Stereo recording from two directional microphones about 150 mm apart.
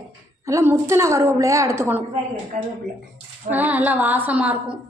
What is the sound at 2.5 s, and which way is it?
Speech, 60° right (ahead or behind).